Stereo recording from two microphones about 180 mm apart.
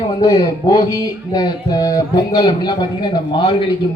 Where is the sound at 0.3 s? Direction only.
20° left (ahead or behind).